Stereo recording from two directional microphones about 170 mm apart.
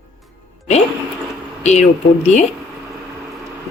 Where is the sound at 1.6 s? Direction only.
40° left (ahead or behind).